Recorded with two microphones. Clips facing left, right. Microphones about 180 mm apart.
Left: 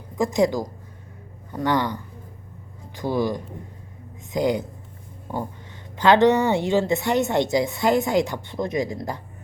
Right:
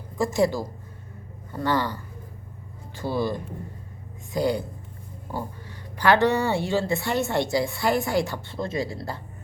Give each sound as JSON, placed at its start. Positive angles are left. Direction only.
{"t": 0.2, "sound": "a woman's voice", "side_deg": 15}
{"t": 6.0, "sound": "a woman's voice", "side_deg": 20}